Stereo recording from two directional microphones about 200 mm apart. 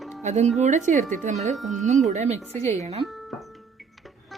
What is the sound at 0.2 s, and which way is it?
Speech, 35° right (ahead or behind).